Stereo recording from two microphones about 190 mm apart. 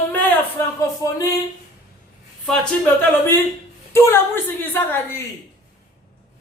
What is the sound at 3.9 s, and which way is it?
A woman's voice, 10° left (ahead or behind).